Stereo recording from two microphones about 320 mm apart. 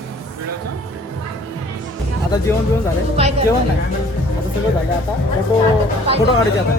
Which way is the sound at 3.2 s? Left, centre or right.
Centre.